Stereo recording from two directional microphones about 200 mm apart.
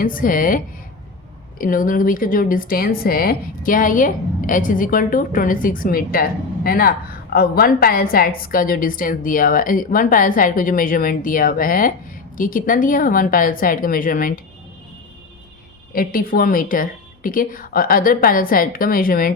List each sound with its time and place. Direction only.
0.0 s a woman's voice: 45° left (ahead or behind)
15.9 s a woman's voice: 45° left (ahead or behind)